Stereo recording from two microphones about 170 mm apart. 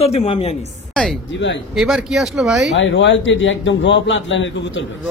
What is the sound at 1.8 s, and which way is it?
Speech, centre (ahead or behind).